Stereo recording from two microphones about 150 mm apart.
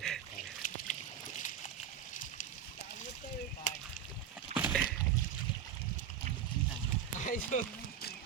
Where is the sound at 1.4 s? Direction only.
55° left (ahead or behind).